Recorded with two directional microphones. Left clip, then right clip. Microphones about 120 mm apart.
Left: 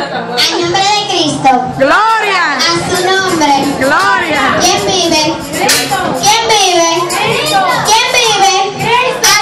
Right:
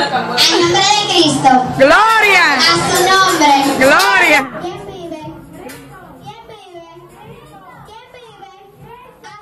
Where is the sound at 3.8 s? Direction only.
15° right (ahead or behind).